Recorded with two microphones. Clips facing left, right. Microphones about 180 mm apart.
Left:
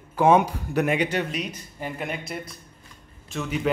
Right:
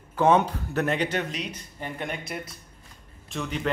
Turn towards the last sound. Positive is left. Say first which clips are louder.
# left 3 dB
turn(degrees=5)  # may be behind; listen again after turning